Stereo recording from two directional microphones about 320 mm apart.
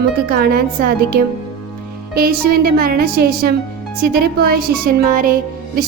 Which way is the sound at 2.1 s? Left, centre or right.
Right.